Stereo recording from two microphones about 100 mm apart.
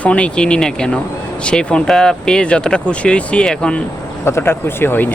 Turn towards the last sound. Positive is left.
turn(degrees=20)  # may be behind; listen again after turning